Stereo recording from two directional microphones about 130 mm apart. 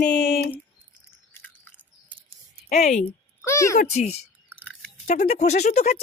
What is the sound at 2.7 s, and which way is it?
Speech, 60° left (ahead or behind).